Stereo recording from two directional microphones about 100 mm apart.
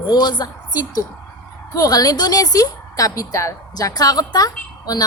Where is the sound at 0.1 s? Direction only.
45° left (ahead or behind).